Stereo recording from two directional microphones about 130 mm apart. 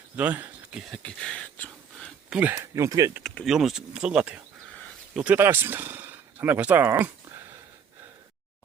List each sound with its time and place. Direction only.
0.2 s a sound: 15° right (ahead or behind); by 2.1 s 10° left (ahead or behind)
2.3 s speech: 10° right (ahead or behind)
2.6 s speech: 25° right (ahead or behind)
3.4 s speech: centre (ahead or behind)